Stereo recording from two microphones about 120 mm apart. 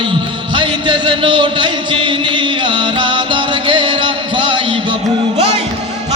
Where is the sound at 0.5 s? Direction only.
40° right (ahead or behind).